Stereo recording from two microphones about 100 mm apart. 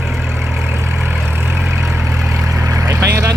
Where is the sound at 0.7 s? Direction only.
25° right (ahead or behind).